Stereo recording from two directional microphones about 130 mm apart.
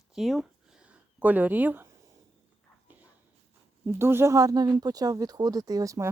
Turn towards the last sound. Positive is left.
turn(degrees=-25)  # may be behind; listen again after turning